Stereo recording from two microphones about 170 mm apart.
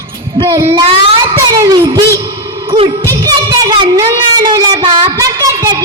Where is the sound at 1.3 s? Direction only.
25° right (ahead or behind).